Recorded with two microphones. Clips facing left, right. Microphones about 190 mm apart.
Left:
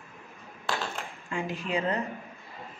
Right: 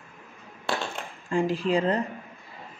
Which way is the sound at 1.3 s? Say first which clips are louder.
Right 7 dB; 35° right (ahead or behind).